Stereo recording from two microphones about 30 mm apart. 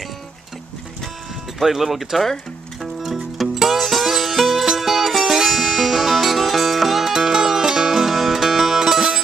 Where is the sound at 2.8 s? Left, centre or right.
Centre.